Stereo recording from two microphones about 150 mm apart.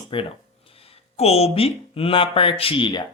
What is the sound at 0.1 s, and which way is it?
Speech, 35° left (ahead or behind).